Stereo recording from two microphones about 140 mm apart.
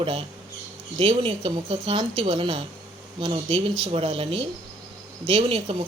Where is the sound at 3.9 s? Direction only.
45° right (ahead or behind).